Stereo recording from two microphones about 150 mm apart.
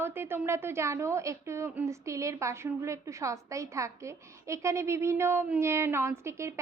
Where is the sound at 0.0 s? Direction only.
15° right (ahead or behind).